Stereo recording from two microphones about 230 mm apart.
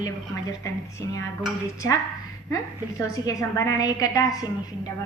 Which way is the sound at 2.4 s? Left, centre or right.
Centre.